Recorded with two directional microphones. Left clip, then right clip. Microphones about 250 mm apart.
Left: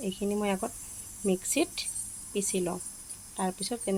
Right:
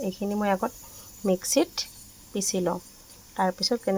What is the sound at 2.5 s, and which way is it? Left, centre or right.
A woman's voice, centre.